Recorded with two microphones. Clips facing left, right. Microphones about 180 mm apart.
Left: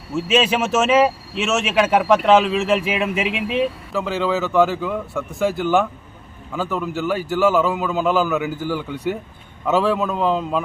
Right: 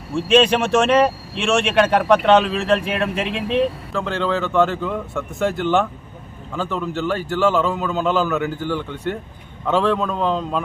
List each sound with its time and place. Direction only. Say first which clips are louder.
0.1 s speech: right 3 dB; 5° left (ahead or behind)